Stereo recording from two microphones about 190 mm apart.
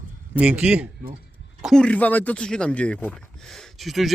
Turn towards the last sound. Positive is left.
turn(degrees=0)  # may be behind; listen again after turning